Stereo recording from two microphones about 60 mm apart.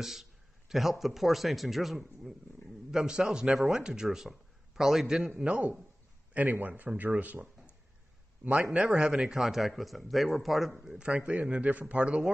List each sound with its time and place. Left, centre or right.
0.0 s speech: centre
5.4 s a man's voice: right
8.7 s speech: centre
11.1 s a man's voice: right